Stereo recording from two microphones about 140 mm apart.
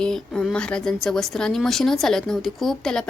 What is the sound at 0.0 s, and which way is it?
Speech, 5° left (ahead or behind).